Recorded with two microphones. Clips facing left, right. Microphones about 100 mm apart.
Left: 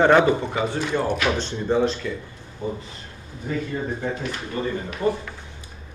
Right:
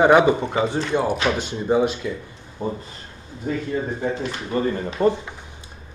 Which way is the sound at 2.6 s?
45° right (ahead or behind).